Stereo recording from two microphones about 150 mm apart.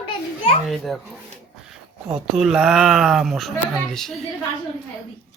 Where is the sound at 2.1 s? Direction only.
5° right (ahead or behind).